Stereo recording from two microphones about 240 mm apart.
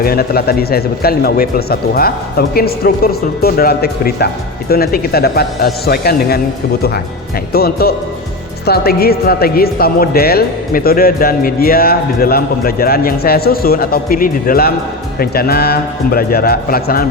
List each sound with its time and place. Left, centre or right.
0.0 s speech: left
7.5 s speech: left